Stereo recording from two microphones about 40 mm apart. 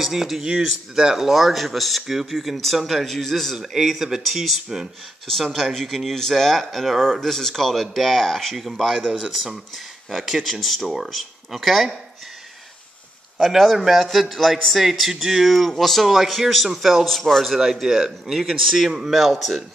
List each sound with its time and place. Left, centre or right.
0.0 s speech: centre
3.5 s speech: centre
10.0 s speech: centre
13.4 s speech: centre
17.0 s speech: centre
17.6 s speech: centre
18.9 s speech: centre
19.1 s speech: centre